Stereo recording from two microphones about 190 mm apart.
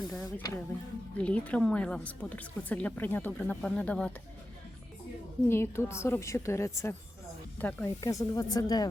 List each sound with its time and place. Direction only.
0.1 s speech: 5° left (ahead or behind)
5.5 s speech: 15° left (ahead or behind)
8.0 s speech: 15° left (ahead or behind)